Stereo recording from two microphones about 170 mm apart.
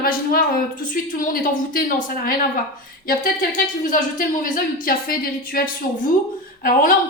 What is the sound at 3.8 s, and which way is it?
A woman's voice, 50° left (ahead or behind).